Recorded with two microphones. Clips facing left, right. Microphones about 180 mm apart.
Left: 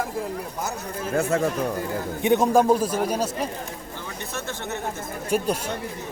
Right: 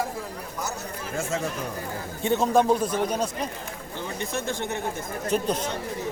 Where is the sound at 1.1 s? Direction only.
65° left (ahead or behind).